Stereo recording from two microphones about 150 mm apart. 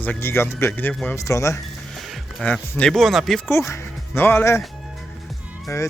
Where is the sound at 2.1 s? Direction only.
5° left (ahead or behind).